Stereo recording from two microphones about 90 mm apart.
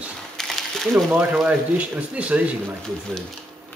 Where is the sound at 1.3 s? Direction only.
15° right (ahead or behind).